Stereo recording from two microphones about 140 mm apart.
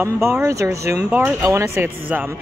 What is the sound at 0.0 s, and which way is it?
Speech, 20° right (ahead or behind).